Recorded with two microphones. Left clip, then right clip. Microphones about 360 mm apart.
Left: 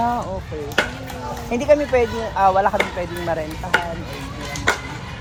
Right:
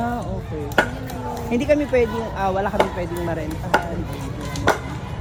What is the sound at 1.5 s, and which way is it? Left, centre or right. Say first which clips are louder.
Speech: left 3 dB; centre.